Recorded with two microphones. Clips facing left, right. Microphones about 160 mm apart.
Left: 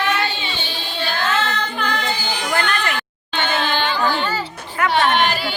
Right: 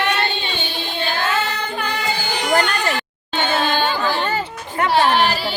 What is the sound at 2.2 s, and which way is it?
Singing, 60° right (ahead or behind).